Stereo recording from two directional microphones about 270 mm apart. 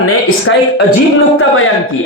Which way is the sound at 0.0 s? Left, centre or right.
Left.